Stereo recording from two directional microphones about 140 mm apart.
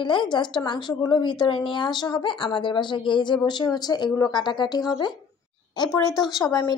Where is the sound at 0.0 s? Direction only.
35° left (ahead or behind).